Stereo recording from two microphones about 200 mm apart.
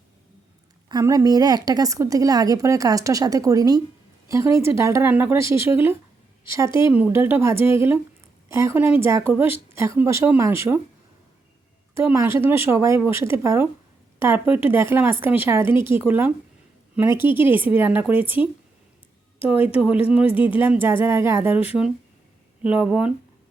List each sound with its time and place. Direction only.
0.9 s a woman's voice: 20° right (ahead or behind)
6.7 s speech: 25° left (ahead or behind)
6.9 s a woman's voice: 10° right (ahead or behind)
11.9 s a woman's voice: 10° right (ahead or behind)
17.3 s a woman's voice: 10° right (ahead or behind)
19.4 s a woman's voice: 10° right (ahead or behind)
20.2 s speech: 25° left (ahead or behind)
20.6 s a woman's voice: 10° right (ahead or behind)